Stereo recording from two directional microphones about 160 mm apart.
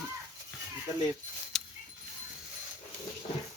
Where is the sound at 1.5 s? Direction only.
5° left (ahead or behind).